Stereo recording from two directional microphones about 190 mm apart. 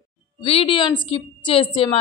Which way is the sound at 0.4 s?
30° left (ahead or behind).